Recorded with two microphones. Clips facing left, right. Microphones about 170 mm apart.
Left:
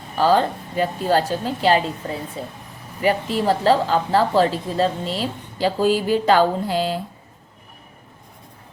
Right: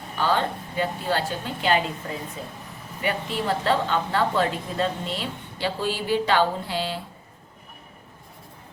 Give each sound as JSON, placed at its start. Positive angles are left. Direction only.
{"t": 0.2, "sound": "a woman's voice", "side_deg": 40}